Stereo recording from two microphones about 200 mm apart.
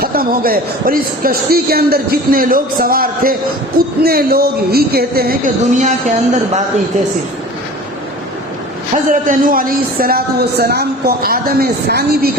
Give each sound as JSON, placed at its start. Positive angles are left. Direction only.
{"t": 0.0, "sound": "a man's voice", "side_deg": -45}
{"t": 9.2, "sound": "a man's voice", "side_deg": -45}